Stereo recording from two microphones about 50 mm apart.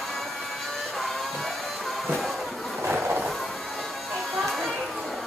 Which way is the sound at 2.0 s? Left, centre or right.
Centre.